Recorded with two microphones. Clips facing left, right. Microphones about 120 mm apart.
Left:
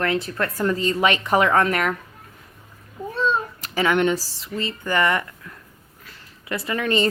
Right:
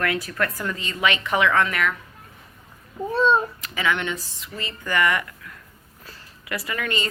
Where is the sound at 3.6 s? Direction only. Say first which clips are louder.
Left 5 dB; 40° left (ahead or behind).